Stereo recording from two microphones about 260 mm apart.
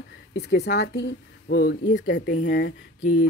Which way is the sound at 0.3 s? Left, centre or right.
Left.